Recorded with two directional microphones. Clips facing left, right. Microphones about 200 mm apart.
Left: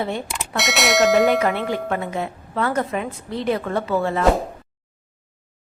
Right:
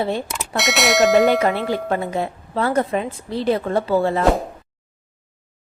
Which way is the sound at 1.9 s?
35° right (ahead or behind).